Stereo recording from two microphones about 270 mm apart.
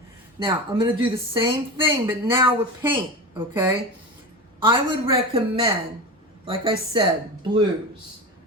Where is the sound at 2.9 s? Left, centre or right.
Centre.